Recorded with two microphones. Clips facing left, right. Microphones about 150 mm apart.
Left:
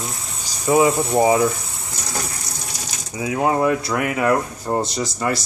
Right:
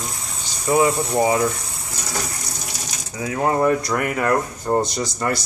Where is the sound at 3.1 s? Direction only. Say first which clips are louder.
Left 1 dB; 15° left (ahead or behind).